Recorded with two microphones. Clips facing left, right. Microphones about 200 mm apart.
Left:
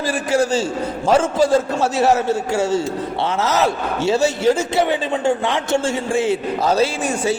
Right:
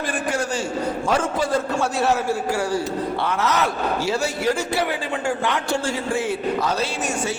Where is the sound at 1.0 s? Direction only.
25° left (ahead or behind).